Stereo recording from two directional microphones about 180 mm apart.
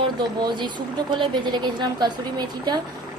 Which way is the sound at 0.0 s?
25° right (ahead or behind).